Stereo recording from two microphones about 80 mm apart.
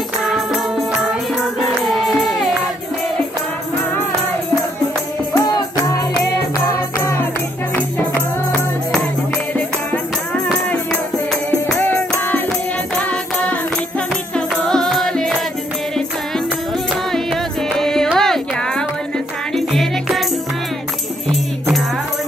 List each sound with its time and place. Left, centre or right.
0.3 s music: centre
5.3 s music: left
8.5 s music: centre
11.8 s music: left; by 15.3 s centre
16.9 s music: centre
18.1 s a sound: centre
19.5 s music: centre